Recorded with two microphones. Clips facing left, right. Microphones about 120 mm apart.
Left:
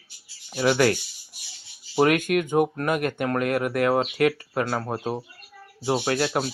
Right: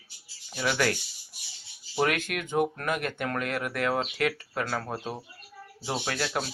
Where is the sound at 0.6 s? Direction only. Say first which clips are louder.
Left 7 dB; 45° left (ahead or behind).